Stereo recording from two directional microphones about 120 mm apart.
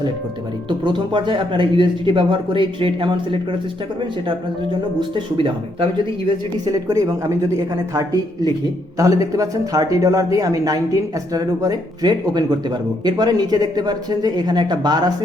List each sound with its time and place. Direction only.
0.7 s a man's voice: 40° right (ahead or behind)
4.9 s a man's voice: 45° right (ahead or behind)
6.7 s speech: 30° right (ahead or behind)
9.0 s speech: 30° right (ahead or behind)